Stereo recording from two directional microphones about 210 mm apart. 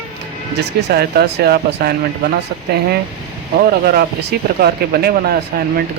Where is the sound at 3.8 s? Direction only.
45° right (ahead or behind).